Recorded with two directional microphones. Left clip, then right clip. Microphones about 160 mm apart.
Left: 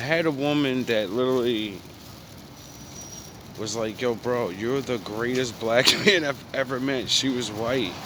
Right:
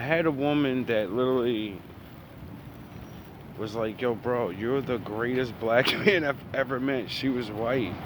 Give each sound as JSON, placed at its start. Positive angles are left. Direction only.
{"t": 0.0, "sound": "speech", "side_deg": 25}
{"t": 3.6, "sound": "speech", "side_deg": 25}